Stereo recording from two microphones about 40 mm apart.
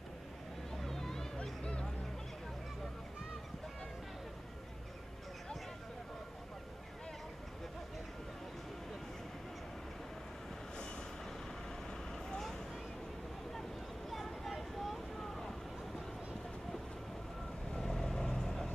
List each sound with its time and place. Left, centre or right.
0.7 s vehicle: centre
1.6 s music: left
11.9 s vehicle: centre
14.1 s vehicle: centre
17.7 s vehicle: centre